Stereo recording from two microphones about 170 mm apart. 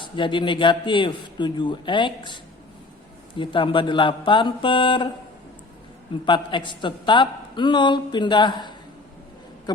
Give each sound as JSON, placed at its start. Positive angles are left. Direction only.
{"t": 0.0, "sound": "speech", "side_deg": 30}
{"t": 6.2, "sound": "speech", "side_deg": 30}